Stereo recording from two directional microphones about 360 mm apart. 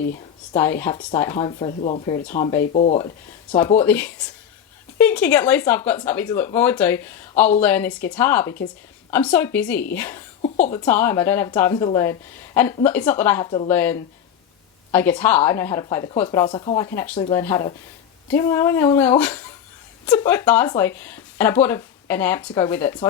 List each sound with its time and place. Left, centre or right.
0.5 s speech: centre